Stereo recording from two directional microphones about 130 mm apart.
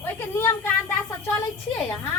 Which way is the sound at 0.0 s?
20° left (ahead or behind).